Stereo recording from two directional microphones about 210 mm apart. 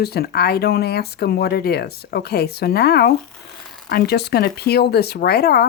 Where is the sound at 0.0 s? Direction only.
50° left (ahead or behind).